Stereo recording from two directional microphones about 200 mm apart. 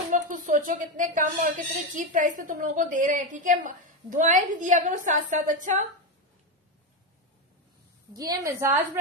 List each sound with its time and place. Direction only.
0.1 s a woman's voice: 40° right (ahead or behind)
8.1 s a woman's voice: 20° right (ahead or behind)